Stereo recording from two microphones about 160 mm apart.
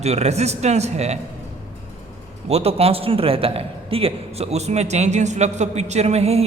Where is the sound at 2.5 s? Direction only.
40° right (ahead or behind).